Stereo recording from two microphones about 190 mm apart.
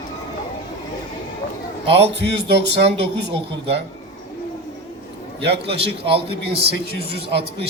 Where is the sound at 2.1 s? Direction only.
65° right (ahead or behind).